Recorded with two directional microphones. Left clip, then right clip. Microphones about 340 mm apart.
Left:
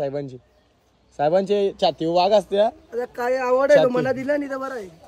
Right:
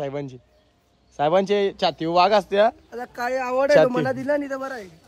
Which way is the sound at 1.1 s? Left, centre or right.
Centre.